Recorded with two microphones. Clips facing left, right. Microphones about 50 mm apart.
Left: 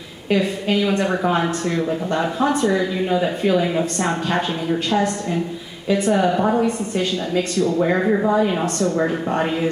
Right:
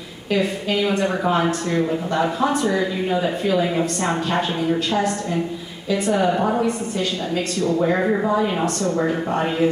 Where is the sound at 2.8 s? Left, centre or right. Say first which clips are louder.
Left 1 dB; centre.